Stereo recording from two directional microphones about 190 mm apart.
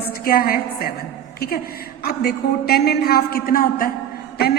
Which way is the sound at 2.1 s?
55° left (ahead or behind).